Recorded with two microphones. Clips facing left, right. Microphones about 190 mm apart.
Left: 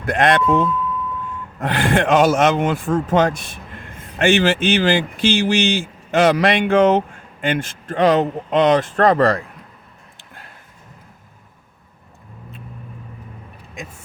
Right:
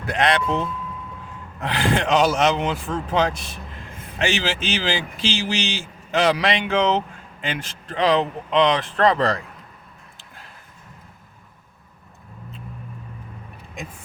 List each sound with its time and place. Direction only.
0.1 s speech: 50° left (ahead or behind)